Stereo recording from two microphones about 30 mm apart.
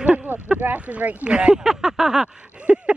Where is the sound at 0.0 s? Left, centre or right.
Right.